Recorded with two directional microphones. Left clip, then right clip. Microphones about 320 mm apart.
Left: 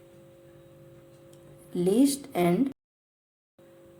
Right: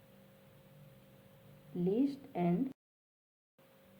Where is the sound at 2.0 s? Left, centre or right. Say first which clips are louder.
Left 11 dB; left.